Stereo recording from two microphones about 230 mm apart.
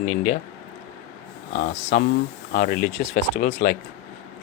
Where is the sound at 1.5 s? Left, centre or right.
Left.